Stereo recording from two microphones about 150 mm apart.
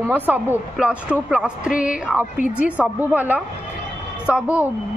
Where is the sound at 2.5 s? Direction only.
10° right (ahead or behind).